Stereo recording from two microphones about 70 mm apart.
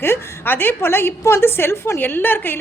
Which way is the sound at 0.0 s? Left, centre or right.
Left.